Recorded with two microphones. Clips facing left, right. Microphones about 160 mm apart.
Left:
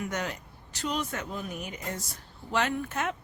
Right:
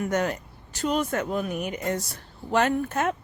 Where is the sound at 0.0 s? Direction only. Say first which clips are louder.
Right 8 dB; 50° right (ahead or behind); by 2.0 s 65° right (ahead or behind).